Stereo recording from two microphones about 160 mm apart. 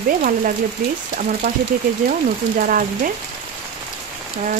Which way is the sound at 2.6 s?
60° right (ahead or behind).